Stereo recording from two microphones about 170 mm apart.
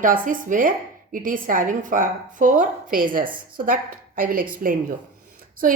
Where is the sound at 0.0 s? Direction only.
50° right (ahead or behind).